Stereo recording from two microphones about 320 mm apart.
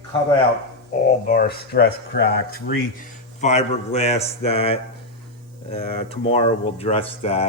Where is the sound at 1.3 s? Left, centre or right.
Left.